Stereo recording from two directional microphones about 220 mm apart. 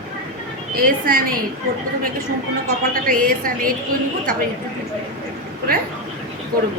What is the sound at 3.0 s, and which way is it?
Speech, 40° right (ahead or behind).